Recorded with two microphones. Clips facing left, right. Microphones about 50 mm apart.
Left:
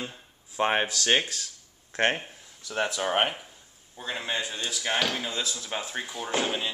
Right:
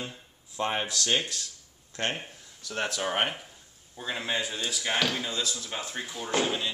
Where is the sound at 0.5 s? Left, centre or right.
Left.